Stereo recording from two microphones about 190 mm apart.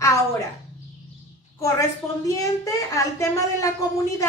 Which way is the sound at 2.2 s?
15° left (ahead or behind).